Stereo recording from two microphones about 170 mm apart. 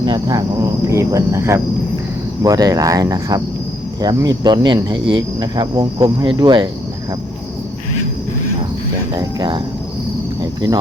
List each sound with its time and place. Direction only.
0.0 s speech: 25° right (ahead or behind)
9.1 s speech: 30° right (ahead or behind)